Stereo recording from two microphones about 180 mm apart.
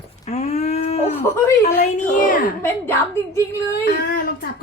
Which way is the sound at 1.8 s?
45° left (ahead or behind).